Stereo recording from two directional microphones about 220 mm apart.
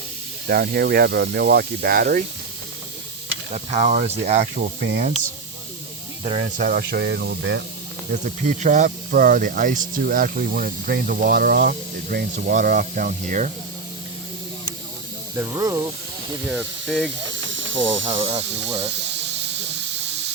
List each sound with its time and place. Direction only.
0.4 s speech: 45° right (ahead or behind)
3.5 s speech: 30° right (ahead or behind)
4.4 s speech: 45° right (ahead or behind)
6.2 s speech: 25° right (ahead or behind)
6.6 s speech: 40° right (ahead or behind)
8.1 s speech: 35° right (ahead or behind)
15.4 s speech: 15° right (ahead or behind)
16.5 s speech: 5° right (ahead or behind)
17.3 s snake: 60° right (ahead or behind)
18.1 s speech: 25° right (ahead or behind)
18.9 s hiss: 50° right (ahead or behind)